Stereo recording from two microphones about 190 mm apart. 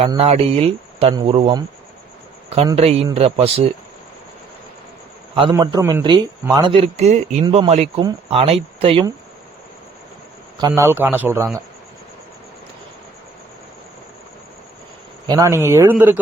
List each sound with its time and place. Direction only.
0.0 s speech: 30° right (ahead or behind)
2.7 s a man's voice: 30° right (ahead or behind)
5.3 s a man's voice: 25° right (ahead or behind)
5.5 s a man's voice: 15° right (ahead or behind)
10.6 s a man's voice: 15° right (ahead or behind)
15.3 s a man's voice: 15° right (ahead or behind)